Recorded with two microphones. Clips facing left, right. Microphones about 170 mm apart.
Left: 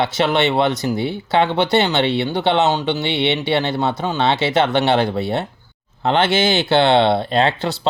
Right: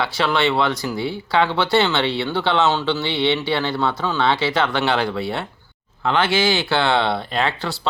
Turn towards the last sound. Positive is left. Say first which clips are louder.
# left 5 dB
turn(degrees=25)  # may be behind; listen again after turning